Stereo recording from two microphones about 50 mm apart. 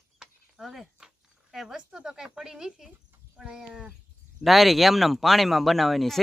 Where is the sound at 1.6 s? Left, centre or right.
Centre.